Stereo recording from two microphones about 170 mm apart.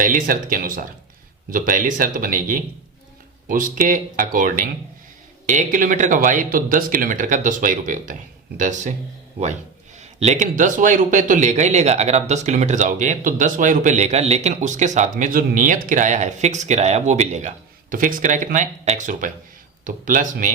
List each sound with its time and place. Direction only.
0.0 s speech: 55° right (ahead or behind)
10.0 s speech: 40° right (ahead or behind)